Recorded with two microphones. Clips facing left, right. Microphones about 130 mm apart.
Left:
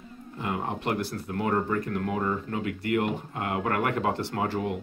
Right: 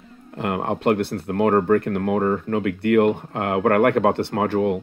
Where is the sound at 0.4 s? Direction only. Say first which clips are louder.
Right 7 dB; 65° right (ahead or behind).